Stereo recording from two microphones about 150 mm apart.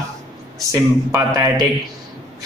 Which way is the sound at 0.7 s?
20° right (ahead or behind).